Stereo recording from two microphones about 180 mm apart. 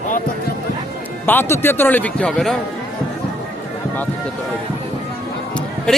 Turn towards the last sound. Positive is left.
turn(degrees=5)  # may be behind; listen again after turning